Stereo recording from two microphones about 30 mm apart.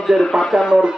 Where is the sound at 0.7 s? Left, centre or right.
Right.